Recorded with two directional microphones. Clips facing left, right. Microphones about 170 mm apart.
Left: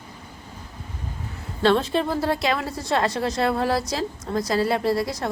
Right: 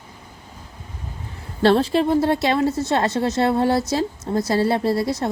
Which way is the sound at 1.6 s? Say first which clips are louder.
Right 4 dB; 35° right (ahead or behind).